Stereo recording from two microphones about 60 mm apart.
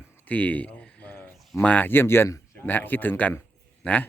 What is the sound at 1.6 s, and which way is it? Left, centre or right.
Speech, left.